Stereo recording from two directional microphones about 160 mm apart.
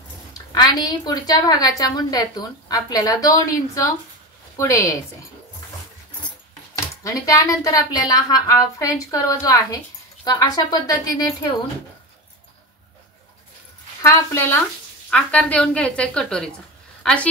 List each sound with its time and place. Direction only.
0.6 s a woman's voice: 25° left (ahead or behind)
7.0 s a woman's voice: 20° left (ahead or behind)
14.0 s a woman's voice: 15° left (ahead or behind)